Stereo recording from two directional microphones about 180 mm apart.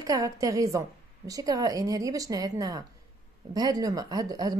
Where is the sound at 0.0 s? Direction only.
20° right (ahead or behind).